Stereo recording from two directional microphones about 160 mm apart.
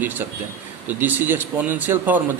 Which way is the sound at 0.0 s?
10° right (ahead or behind).